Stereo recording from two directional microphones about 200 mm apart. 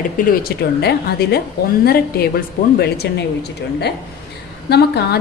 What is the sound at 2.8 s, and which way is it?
A woman's voice, 55° left (ahead or behind).